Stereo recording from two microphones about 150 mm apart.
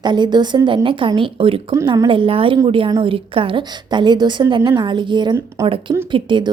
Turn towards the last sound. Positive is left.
turn(degrees=-30)  # may be behind; listen again after turning